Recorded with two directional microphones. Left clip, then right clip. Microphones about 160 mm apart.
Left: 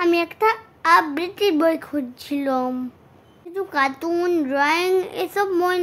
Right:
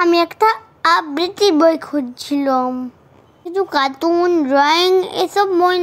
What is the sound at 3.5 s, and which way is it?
Speech, 25° right (ahead or behind).